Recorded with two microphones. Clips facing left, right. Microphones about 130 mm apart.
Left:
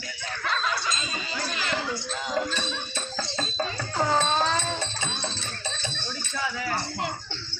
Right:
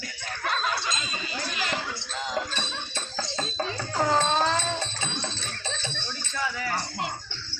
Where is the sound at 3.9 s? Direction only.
5° left (ahead or behind).